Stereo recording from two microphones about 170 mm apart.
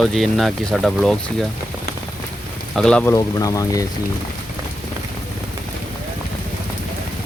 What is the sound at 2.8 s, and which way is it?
Speech, 5° left (ahead or behind).